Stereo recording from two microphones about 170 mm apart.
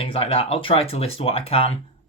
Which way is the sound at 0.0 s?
35° left (ahead or behind).